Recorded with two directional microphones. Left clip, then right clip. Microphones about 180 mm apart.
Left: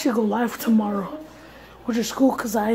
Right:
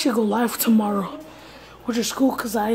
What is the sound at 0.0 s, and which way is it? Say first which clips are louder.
Speech: right 1 dB; 5° right (ahead or behind).